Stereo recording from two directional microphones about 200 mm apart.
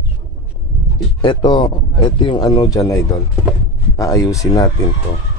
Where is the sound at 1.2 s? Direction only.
25° left (ahead or behind).